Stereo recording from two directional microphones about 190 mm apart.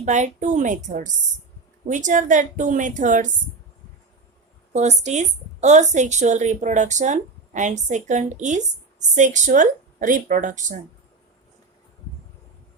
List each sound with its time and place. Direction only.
0.0 s a woman's voice: 40° right (ahead or behind)
4.7 s a woman's voice: 35° right (ahead or behind)